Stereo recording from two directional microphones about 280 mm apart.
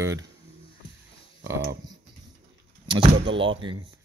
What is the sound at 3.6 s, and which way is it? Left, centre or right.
Speech, centre.